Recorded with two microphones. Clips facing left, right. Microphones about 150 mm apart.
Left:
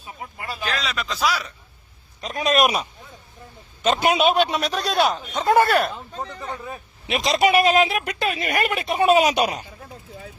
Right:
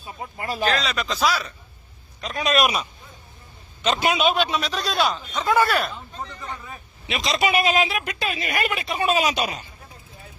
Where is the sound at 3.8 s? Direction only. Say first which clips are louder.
Left 2 dB; 50° left (ahead or behind).